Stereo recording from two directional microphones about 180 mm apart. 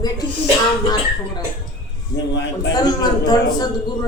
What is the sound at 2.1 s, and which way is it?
Speech, 70° left (ahead or behind).